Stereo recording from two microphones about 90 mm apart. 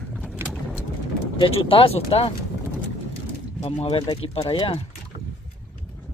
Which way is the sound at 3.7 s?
90° left.